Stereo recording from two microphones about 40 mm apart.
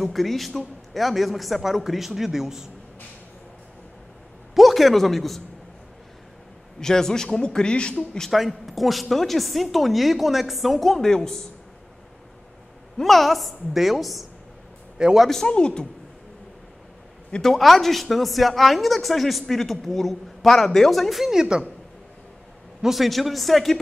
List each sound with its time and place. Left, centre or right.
0.0 s a woman's voice: centre
4.6 s speech: centre
6.8 s a man's voice: centre
7.4 s speech: left
8.3 s a woman's voice: centre
12.9 s a woman's voice: centre
15.0 s a woman's voice: centre
15.4 s speech: left
17.4 s a woman's voice: centre
21.3 s a woman's voice: centre
22.8 s a woman's voice: centre